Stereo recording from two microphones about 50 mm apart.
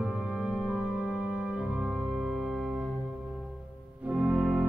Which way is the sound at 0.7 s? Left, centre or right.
Centre.